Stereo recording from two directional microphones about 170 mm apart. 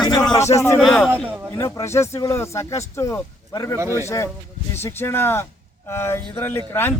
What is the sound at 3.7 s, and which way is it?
Speech, 15° right (ahead or behind).